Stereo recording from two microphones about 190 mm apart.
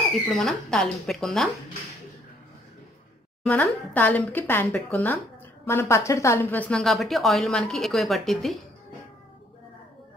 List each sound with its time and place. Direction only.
0.1 s speech: centre (ahead or behind)
3.4 s speech: 10° left (ahead or behind)